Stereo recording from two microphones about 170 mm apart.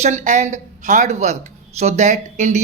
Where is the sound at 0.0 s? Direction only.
45° right (ahead or behind).